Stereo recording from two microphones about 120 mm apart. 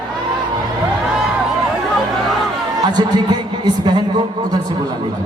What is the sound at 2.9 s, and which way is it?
Speech, 35° right (ahead or behind).